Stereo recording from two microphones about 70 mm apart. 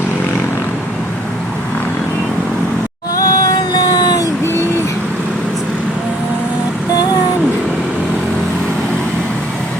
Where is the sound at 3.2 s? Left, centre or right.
Left.